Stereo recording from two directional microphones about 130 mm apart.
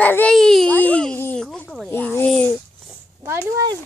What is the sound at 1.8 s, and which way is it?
Speech, 15° left (ahead or behind).